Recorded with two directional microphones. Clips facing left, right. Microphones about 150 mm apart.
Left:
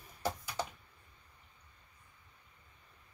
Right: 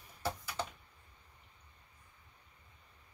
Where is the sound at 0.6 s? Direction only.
10° left (ahead or behind).